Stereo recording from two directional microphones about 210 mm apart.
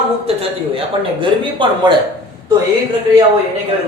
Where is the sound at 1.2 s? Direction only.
20° right (ahead or behind).